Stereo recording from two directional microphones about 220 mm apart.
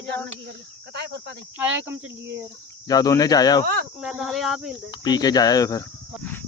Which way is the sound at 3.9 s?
5° right (ahead or behind).